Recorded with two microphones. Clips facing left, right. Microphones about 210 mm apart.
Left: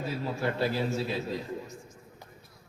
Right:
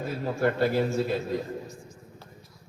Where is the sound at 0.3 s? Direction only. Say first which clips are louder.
Right 6 dB; 50° right (ahead or behind).